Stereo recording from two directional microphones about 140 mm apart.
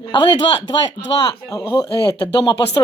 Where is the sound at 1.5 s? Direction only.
25° left (ahead or behind).